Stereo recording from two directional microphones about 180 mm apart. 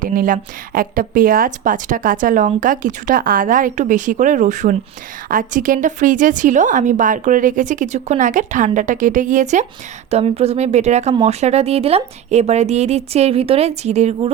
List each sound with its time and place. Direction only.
0.0 s a woman's voice: 50° right (ahead or behind)